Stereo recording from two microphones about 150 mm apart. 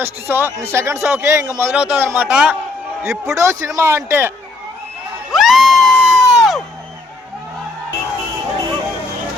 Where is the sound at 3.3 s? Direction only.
20° right (ahead or behind).